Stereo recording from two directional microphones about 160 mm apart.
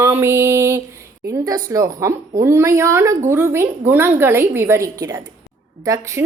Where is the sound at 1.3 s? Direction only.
20° right (ahead or behind).